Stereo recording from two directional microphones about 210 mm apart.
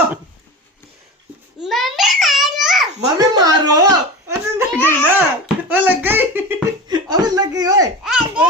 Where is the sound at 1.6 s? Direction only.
Centre (ahead or behind).